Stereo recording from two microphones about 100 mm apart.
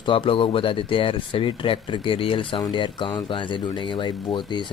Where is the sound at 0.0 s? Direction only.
60° left (ahead or behind).